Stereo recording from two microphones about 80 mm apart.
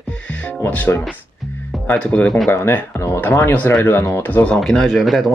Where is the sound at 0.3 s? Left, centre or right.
Centre.